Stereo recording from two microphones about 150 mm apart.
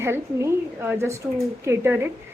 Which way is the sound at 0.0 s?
15° right (ahead or behind).